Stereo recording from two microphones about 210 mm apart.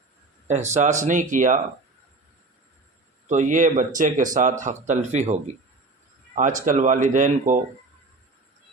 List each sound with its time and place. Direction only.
0.4 s speech: 35° right (ahead or behind)
3.2 s speech: 35° right (ahead or behind)